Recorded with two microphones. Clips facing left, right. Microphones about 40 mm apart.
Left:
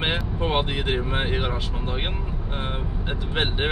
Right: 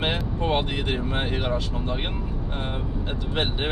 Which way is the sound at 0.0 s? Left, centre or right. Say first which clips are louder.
Even; centre.